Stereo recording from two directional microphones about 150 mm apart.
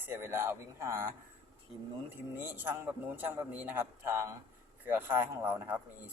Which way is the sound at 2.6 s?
15° right (ahead or behind).